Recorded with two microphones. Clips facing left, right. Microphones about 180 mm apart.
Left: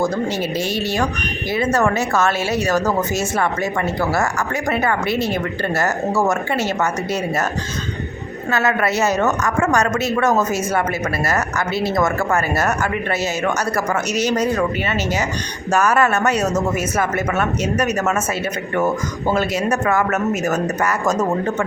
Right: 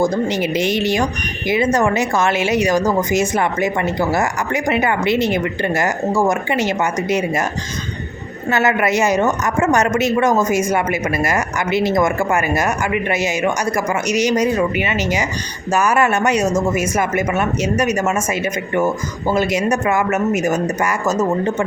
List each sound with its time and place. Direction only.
0.0 s a woman's voice: 15° right (ahead or behind)
8.4 s a woman's voice: 25° right (ahead or behind)
19.3 s a woman's voice: 10° right (ahead or behind)